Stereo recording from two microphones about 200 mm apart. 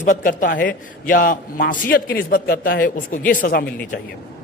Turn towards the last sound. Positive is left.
turn(degrees=45)  # may be behind; listen again after turning